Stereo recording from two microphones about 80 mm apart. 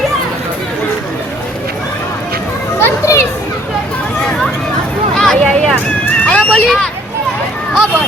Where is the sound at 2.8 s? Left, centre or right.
Left.